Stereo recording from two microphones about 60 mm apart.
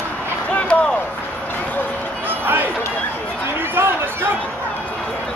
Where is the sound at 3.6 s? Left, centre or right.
Right.